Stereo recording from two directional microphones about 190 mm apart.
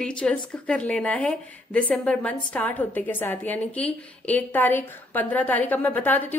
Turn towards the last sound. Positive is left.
turn(degrees=10)  # may be behind; listen again after turning